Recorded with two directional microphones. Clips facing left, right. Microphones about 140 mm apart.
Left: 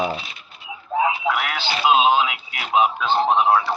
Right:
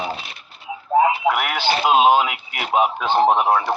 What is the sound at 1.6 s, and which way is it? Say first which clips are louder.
A man's voice: right 1 dB; 50° right (ahead or behind).